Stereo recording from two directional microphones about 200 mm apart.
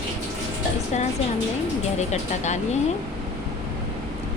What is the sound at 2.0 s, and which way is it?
Speech, 35° left (ahead or behind).